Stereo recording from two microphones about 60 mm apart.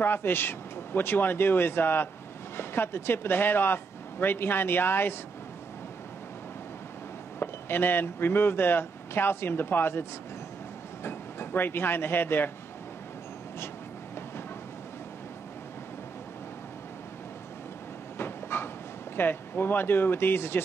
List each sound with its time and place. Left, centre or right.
0.0 s speech: left
7.3 s speech: left
11.1 s speech: left
18.1 s train: left
19.1 s speech: left